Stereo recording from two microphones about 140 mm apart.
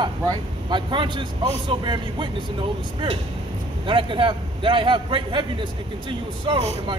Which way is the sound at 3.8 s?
35° right (ahead or behind).